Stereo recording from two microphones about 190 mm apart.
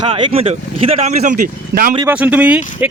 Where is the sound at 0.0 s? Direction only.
30° right (ahead or behind); by 2.0 s 45° right (ahead or behind).